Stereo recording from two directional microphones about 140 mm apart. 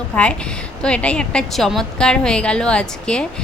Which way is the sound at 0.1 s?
10° left (ahead or behind).